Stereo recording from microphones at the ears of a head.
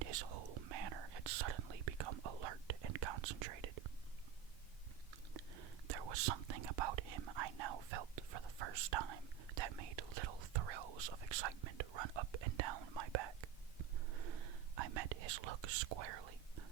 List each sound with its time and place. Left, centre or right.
0.0 s whispering: right
5.1 s whispering: right